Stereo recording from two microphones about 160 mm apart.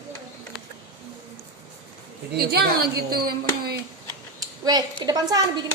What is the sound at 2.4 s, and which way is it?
A woman's voice, 80° right.